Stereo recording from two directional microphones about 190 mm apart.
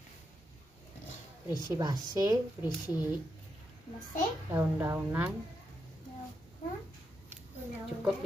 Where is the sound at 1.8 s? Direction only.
20° right (ahead or behind).